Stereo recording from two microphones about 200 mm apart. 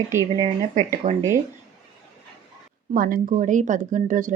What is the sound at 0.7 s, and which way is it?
Speech, 35° right (ahead or behind).